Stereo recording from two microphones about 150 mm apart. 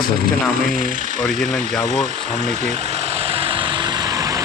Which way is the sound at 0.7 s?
65° right (ahead or behind).